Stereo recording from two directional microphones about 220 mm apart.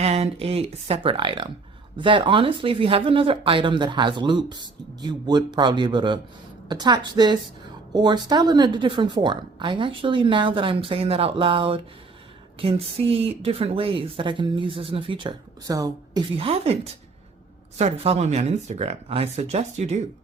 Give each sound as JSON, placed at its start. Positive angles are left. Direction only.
{"t": 0.0, "sound": "speech", "side_deg": -30}